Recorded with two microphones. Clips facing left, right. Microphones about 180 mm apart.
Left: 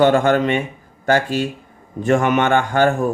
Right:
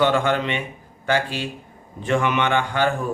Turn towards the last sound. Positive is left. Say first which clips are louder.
# left 6 dB
turn(degrees=45)  # may be behind; listen again after turning